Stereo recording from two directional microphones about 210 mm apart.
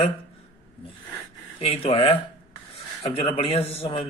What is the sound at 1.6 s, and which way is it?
Speech, 30° left (ahead or behind).